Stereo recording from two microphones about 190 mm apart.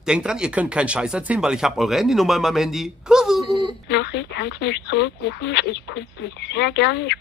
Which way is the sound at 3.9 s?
65° left (ahead or behind).